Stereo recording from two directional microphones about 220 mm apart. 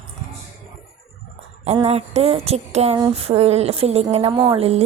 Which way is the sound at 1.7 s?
25° right (ahead or behind).